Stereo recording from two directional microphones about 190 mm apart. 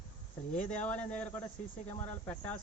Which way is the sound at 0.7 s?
5° left (ahead or behind).